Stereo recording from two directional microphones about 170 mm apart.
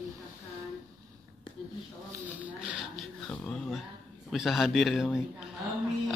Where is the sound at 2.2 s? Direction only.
10° right (ahead or behind).